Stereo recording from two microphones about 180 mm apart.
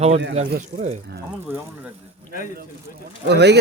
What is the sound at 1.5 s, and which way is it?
Speech, 15° right (ahead or behind).